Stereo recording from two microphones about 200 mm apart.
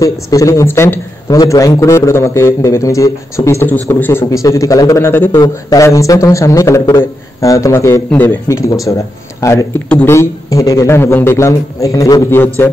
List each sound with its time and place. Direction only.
0.0 s a man's voice: 15° left (ahead or behind)